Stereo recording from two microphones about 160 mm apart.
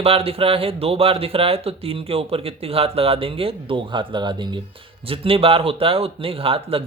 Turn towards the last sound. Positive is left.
turn(degrees=-35)  # may be behind; listen again after turning